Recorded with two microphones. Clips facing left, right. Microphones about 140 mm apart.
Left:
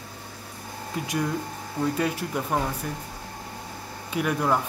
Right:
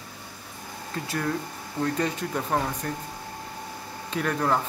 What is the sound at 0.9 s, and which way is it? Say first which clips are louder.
Speech: left 1 dB; 15° left (ahead or behind).